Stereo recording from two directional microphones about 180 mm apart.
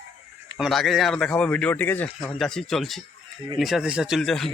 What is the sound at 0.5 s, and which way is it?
Speech, centre (ahead or behind).